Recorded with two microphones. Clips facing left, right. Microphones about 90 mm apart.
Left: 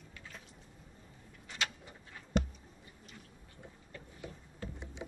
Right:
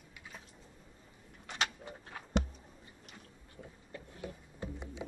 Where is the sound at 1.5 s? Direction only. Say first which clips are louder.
Right 3 dB; 65° right (ahead or behind).